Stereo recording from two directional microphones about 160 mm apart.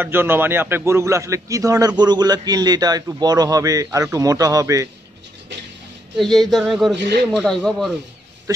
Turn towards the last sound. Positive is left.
turn(degrees=0)  # may be behind; listen again after turning